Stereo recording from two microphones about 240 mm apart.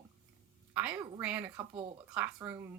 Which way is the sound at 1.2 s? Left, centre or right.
Centre.